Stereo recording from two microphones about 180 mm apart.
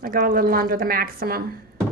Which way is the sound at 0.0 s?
50° right (ahead or behind).